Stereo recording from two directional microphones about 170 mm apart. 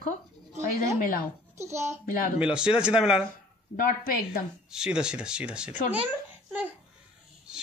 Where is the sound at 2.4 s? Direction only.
5° right (ahead or behind).